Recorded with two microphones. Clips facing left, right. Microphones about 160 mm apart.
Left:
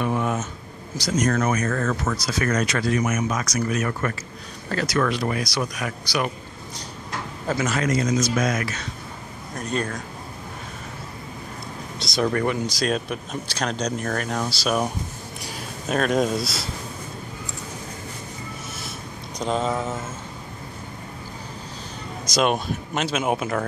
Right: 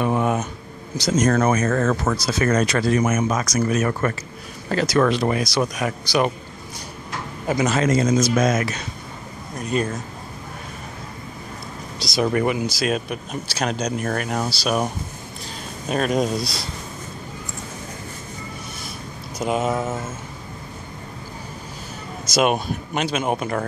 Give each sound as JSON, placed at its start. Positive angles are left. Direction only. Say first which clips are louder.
{"t": 0.0, "sound": "a sound", "louder": "right 3 dB", "side_deg": -20}
{"t": 0.9, "sound": "speech", "louder": "right 3 dB", "side_deg": -25}
{"t": 1.7, "sound": "speech", "louder": "right 4 dB", "side_deg": -45}
{"t": 2.2, "sound": "speech", "louder": "right 4 dB", "side_deg": -30}
{"t": 7.4, "sound": "speech", "louder": "right 4 dB", "side_deg": -20}
{"t": 9.6, "sound": "speech", "louder": "right 3 dB", "side_deg": -5}
{"t": 12.0, "sound": "speech", "louder": "right 2 dB", "side_deg": -10}
{"t": 15.9, "sound": "speech", "louder": "even", "side_deg": 0}
{"t": 18.9, "sound": "a sound", "louder": "right 1 dB", "side_deg": -5}
{"t": 22.2, "sound": "speech", "louder": "right 2 dB", "side_deg": -5}